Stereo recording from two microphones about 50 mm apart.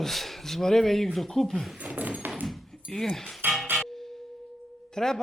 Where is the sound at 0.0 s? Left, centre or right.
Centre.